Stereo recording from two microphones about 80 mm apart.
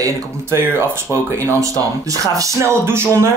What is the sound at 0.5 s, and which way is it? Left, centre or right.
Speech, right.